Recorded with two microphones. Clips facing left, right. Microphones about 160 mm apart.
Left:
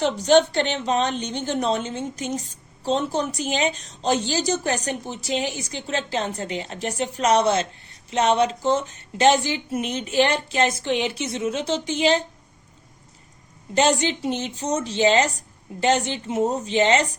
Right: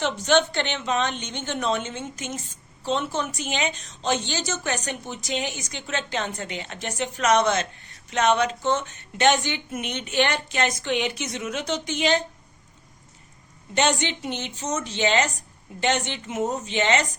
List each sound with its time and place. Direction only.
0.3 s a woman's voice: 35° left (ahead or behind)
13.7 s a woman's voice: 35° left (ahead or behind)